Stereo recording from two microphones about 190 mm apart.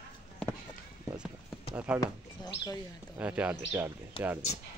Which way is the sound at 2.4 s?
20° left (ahead or behind).